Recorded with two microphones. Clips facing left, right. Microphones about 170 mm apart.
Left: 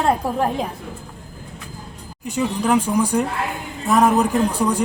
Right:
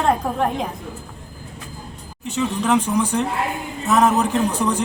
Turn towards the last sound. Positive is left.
turn(degrees=10)  # may be behind; listen again after turning